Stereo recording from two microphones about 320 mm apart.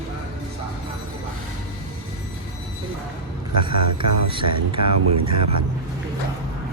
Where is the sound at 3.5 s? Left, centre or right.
Right.